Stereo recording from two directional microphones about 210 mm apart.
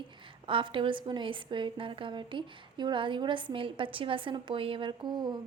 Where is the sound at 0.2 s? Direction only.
25° right (ahead or behind).